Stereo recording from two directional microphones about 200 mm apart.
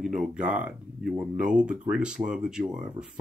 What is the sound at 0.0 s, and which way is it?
Speech, centre (ahead or behind).